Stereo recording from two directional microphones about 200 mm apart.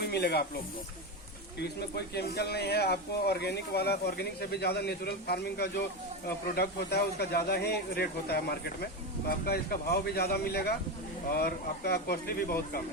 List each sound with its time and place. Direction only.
0.0 s speech: 55° left (ahead or behind)
1.5 s speech: 55° left (ahead or behind)